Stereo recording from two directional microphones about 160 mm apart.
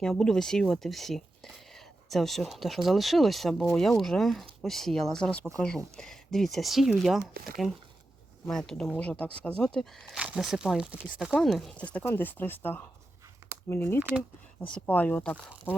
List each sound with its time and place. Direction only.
0.0 s speech: 5° left (ahead or behind)